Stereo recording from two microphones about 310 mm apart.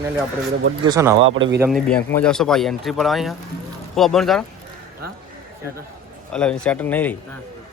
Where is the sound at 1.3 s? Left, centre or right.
Right.